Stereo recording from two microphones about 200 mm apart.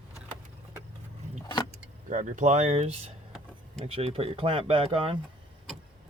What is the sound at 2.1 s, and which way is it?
Speech, 40° right (ahead or behind).